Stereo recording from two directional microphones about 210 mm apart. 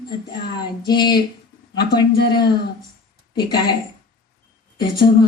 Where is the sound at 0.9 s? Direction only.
20° left (ahead or behind).